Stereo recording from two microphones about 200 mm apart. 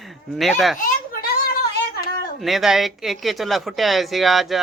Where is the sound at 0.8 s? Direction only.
50° left (ahead or behind).